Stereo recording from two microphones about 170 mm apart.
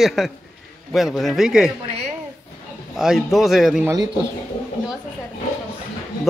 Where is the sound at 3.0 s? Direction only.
Centre (ahead or behind).